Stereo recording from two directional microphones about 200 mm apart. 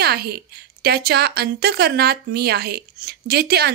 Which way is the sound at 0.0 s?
50° right (ahead or behind).